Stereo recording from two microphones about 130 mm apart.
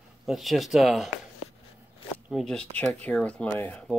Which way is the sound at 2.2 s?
Centre (ahead or behind).